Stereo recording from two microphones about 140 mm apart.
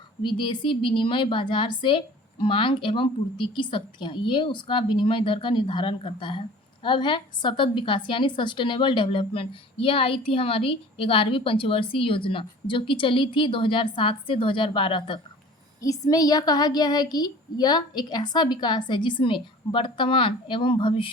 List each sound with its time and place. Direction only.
0.2 s a woman's voice: 35° left (ahead or behind)
15.8 s a woman's voice: 25° left (ahead or behind)